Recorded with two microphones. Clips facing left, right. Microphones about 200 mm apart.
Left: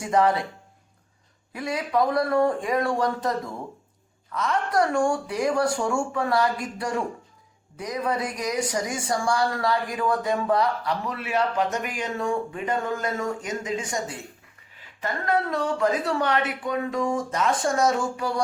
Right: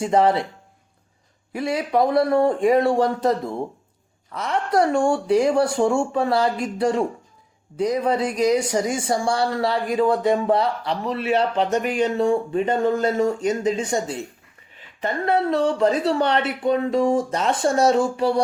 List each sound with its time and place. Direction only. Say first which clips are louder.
0.0 s speech: right 4 dB; 30° right (ahead or behind)
1.5 s speech: right 4 dB; 30° right (ahead or behind)
15.0 s speech: right 4 dB; 30° right (ahead or behind)